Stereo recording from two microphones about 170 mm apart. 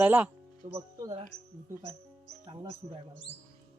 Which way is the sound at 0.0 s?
10° right (ahead or behind).